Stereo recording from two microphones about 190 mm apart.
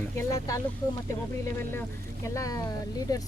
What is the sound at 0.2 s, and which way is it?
Speech, 15° left (ahead or behind).